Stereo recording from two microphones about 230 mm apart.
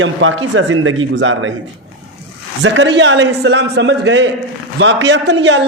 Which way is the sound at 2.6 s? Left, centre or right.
Right.